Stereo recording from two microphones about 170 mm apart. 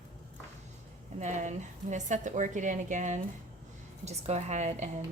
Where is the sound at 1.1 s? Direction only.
45° right (ahead or behind).